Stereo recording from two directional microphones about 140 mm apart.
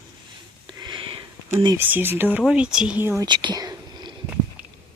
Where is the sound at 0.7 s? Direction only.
35° right (ahead or behind).